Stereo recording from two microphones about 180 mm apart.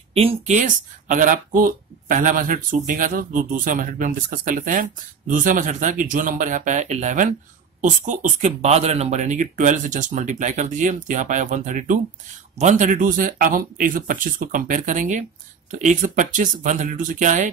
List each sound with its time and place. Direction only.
0.1 s speech: 35° right (ahead or behind)